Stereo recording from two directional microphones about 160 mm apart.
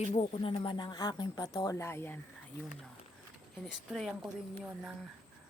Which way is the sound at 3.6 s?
Centre (ahead or behind).